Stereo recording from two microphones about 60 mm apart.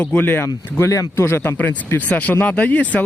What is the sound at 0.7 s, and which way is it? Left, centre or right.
Speech, left.